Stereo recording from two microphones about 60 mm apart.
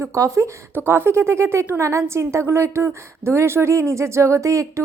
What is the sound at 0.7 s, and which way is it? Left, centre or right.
A woman's voice, right.